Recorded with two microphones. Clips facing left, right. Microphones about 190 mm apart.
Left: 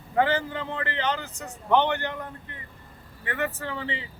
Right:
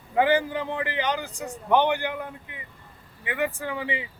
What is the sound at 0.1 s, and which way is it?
A man's voice, 15° right (ahead or behind).